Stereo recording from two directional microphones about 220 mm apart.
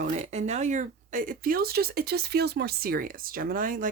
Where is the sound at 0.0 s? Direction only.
30° right (ahead or behind).